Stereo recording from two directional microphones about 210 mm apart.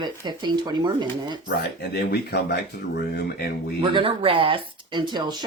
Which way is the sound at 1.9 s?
50° left (ahead or behind).